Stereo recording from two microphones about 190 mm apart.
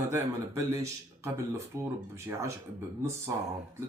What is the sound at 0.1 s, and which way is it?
Speech, 15° right (ahead or behind).